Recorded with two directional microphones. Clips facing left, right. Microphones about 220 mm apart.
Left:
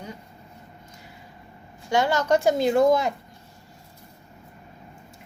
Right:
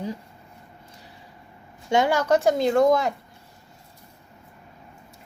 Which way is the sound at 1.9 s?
15° right (ahead or behind).